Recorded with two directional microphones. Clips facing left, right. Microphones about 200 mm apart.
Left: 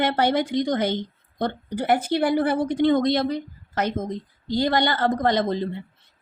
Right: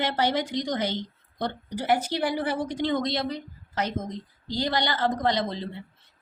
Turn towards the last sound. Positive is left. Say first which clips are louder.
# left 5 dB
turn(degrees=50)  # may be behind; listen again after turning